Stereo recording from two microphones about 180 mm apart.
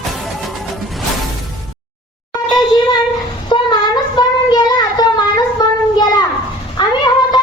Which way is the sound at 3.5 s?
25° left (ahead or behind).